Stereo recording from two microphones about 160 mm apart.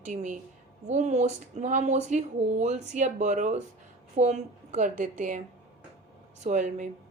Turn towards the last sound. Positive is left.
turn(degrees=-50)  # may be behind; listen again after turning